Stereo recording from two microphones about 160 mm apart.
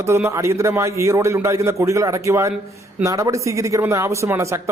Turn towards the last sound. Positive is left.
turn(degrees=-15)  # may be behind; listen again after turning